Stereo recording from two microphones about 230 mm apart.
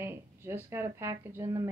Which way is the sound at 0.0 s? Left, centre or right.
Centre.